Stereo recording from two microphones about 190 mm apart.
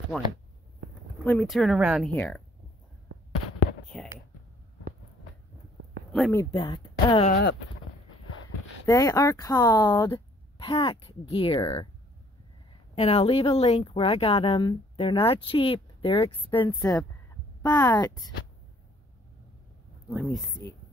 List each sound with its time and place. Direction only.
0.1 s speech: 5° left (ahead or behind)
3.9 s clicking: 5° left (ahead or behind)
6.1 s speech: centre (ahead or behind)
6.5 s speech: 25° left (ahead or behind)
8.8 s speech: 15° left (ahead or behind)
12.9 s speech: 30° left (ahead or behind)
20.1 s speech: 5° left (ahead or behind)